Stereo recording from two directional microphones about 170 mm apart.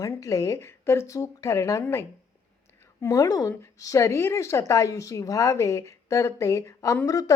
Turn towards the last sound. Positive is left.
turn(degrees=20)  # may be behind; listen again after turning